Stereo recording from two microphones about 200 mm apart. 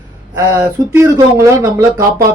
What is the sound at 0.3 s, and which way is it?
Speech, 15° right (ahead or behind).